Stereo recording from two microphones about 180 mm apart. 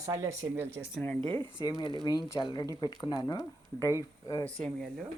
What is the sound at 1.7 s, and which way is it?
Speech, 25° left (ahead or behind).